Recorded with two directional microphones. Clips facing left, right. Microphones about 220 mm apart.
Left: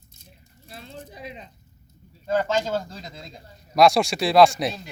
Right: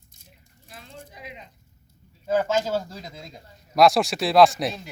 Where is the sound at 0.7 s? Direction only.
30° left (ahead or behind).